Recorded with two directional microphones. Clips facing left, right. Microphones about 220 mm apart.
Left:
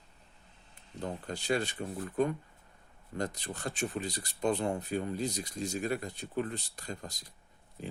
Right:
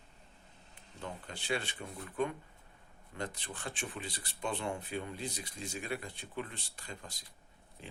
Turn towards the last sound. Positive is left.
turn(degrees=40)  # may be behind; listen again after turning